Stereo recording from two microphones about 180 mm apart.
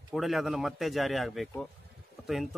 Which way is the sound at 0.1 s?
Centre (ahead or behind).